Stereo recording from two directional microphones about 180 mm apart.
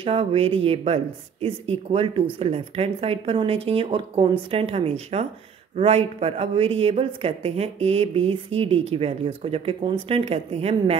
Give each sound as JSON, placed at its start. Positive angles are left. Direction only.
{"t": 0.0, "sound": "speech", "side_deg": -30}